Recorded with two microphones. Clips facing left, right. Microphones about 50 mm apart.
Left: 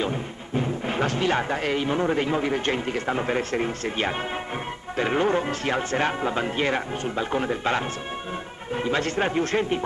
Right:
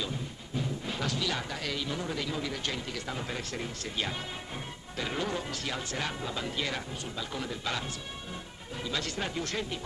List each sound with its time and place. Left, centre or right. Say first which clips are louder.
0.0 s speech: left 9 dB; left